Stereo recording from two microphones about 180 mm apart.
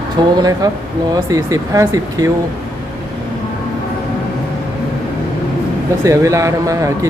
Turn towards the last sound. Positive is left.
turn(degrees=-20)  # may be behind; listen again after turning